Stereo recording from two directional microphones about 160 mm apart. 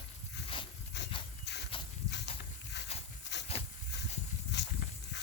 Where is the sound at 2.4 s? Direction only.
90° left.